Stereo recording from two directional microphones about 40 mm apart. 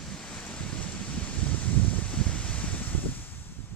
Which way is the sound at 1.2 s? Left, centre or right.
Left.